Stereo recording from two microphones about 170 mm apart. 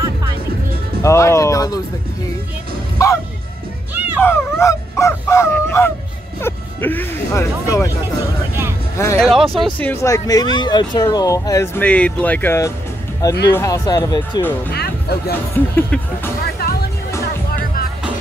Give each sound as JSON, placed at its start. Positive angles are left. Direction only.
{"t": 1.0, "sound": "speech", "side_deg": 15}
{"t": 3.0, "sound": "speech", "side_deg": 20}
{"t": 3.9, "sound": "music", "side_deg": -10}
{"t": 4.2, "sound": "speech", "side_deg": 15}
{"t": 8.9, "sound": "speech", "side_deg": 15}
{"t": 9.2, "sound": "speech", "side_deg": 0}
{"t": 14.7, "sound": "speech", "side_deg": 70}
{"t": 15.5, "sound": "speech", "side_deg": 10}
{"t": 16.6, "sound": "music", "side_deg": 65}